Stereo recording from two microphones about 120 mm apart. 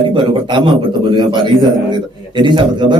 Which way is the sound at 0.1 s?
40° right (ahead or behind).